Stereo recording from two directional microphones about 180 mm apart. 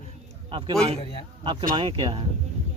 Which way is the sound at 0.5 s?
30° right (ahead or behind).